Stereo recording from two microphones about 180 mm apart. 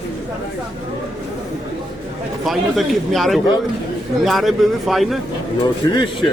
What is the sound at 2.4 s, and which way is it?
Speech, centre (ahead or behind).